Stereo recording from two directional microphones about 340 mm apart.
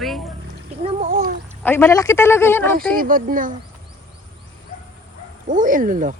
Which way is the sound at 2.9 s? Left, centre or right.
Right.